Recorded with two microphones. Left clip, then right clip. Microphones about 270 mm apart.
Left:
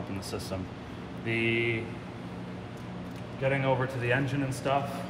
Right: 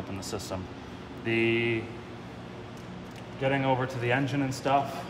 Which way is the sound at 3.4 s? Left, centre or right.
Right.